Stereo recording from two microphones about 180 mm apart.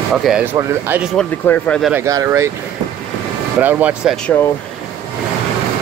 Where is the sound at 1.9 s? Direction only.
15° right (ahead or behind).